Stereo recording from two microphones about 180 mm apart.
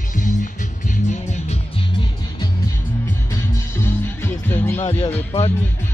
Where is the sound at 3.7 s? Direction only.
15° left (ahead or behind).